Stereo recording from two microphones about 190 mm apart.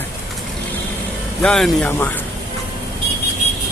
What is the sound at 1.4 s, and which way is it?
Speech, 5° left (ahead or behind).